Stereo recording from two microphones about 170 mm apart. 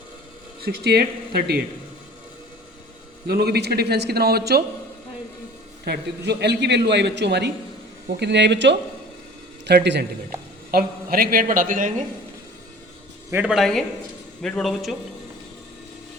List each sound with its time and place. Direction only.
0.6 s speech: 70° right (ahead or behind)
3.2 s speech: 65° right (ahead or behind)
5.8 s a man's voice: 75° right (ahead or behind)
8.0 s a man's voice: 75° right (ahead or behind)
10.7 s a woman's voice: 60° right (ahead or behind)
13.3 s speech: 5° right (ahead or behind)